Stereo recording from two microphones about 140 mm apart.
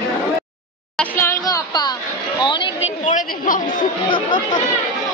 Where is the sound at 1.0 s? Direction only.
15° left (ahead or behind); by 2.7 s 35° left (ahead or behind).